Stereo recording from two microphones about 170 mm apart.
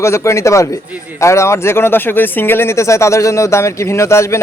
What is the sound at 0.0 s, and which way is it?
Speech, 15° left (ahead or behind).